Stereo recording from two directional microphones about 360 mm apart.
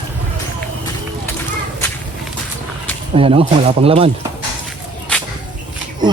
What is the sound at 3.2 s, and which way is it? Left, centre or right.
Speech, centre.